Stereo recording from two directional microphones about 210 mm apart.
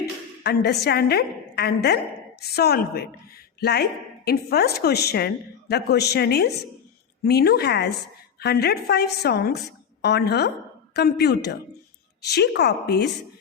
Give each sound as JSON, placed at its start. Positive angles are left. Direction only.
{"t": 0.0, "sound": "a woman's voice", "side_deg": 50}